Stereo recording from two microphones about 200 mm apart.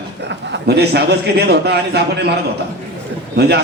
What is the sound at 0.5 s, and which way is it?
A man's voice, 55° right (ahead or behind).